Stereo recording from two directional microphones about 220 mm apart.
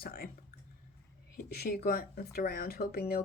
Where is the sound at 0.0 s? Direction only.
40° left (ahead or behind).